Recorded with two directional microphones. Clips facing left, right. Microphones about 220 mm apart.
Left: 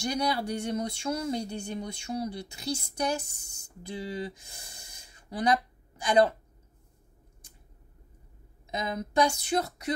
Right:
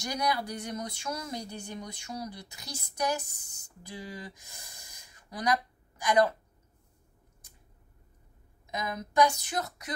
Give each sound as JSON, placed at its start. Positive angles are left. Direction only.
{"t": 0.0, "sound": "speech", "side_deg": 30}
{"t": 8.6, "sound": "speech", "side_deg": 30}